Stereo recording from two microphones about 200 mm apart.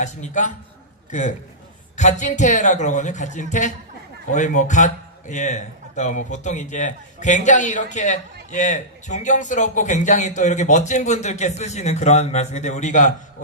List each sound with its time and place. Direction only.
0.0 s a man's voice: 35° left (ahead or behind)
2.0 s a man's voice: 35° left (ahead or behind)